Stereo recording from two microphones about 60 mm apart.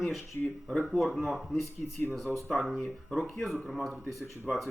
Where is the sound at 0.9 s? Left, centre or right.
Centre.